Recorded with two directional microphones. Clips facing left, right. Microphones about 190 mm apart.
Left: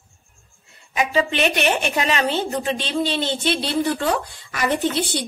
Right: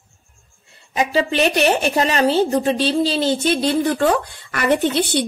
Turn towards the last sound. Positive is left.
turn(degrees=-60)  # may be behind; listen again after turning